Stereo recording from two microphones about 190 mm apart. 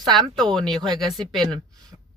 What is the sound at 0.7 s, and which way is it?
Speech, 20° right (ahead or behind).